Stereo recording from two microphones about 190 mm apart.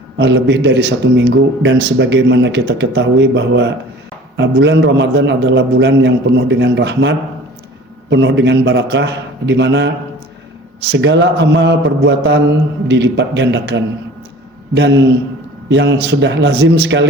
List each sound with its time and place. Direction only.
0.2 s a man's voice: 70° right (ahead or behind)
10.9 s a man's voice: 70° right (ahead or behind)